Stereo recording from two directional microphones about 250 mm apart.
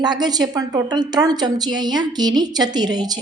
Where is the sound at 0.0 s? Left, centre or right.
Centre.